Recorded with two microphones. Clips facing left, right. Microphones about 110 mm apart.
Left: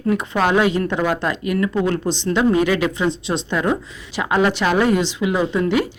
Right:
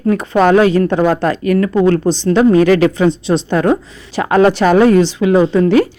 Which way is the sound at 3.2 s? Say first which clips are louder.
Right 7 dB; 35° right (ahead or behind).